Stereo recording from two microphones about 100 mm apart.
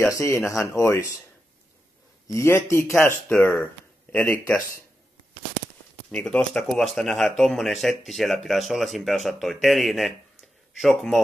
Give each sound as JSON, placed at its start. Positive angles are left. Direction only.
{"t": 0.1, "sound": "speech", "side_deg": 30}
{"t": 2.2, "sound": "speech", "side_deg": 30}
{"t": 6.1, "sound": "speech", "side_deg": 10}